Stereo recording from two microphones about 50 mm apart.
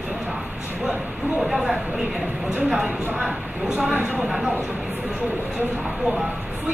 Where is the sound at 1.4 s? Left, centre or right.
Centre; by 4.1 s right.